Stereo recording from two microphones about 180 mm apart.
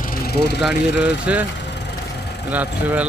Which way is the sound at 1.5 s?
70° left (ahead or behind).